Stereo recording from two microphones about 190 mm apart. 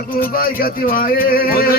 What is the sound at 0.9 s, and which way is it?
Speech, 50° left (ahead or behind).